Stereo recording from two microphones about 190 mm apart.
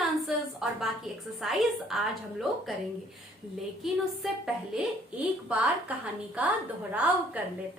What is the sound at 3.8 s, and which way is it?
A woman's voice, 5° right (ahead or behind).